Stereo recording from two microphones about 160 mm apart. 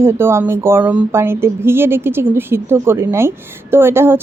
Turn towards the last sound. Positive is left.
turn(degrees=-15)  # may be behind; listen again after turning